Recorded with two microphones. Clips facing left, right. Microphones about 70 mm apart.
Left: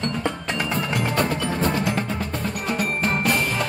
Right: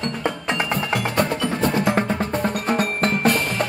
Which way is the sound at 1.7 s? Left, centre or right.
Right.